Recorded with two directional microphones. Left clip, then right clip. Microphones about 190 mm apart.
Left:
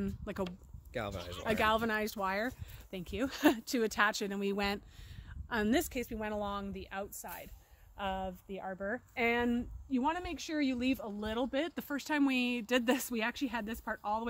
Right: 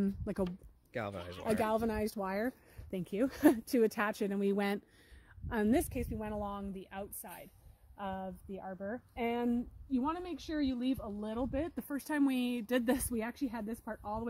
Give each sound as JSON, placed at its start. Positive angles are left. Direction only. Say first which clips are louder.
{"t": 0.0, "sound": "speech", "louder": "right 3 dB", "side_deg": -40}
{"t": 0.9, "sound": "speech", "louder": "left 1 dB", "side_deg": 0}
{"t": 1.6, "sound": "speech", "louder": "left 4 dB", "side_deg": -30}
{"t": 9.8, "sound": "speech", "louder": "left 3 dB", "side_deg": 10}
{"t": 12.0, "sound": "speech", "louder": "left 2 dB", "side_deg": -5}